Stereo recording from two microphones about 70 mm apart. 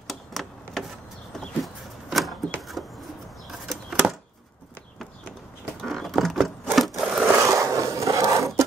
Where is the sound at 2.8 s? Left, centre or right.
Centre.